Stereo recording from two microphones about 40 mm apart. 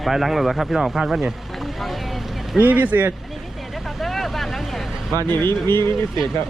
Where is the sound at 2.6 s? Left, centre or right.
Right.